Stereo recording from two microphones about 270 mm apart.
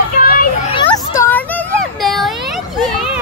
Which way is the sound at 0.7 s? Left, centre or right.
Centre.